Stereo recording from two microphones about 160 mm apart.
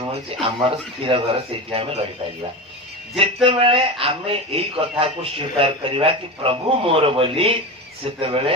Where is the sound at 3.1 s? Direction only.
35° right (ahead or behind).